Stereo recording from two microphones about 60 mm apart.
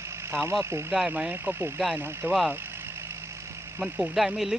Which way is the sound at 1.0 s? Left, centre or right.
Centre.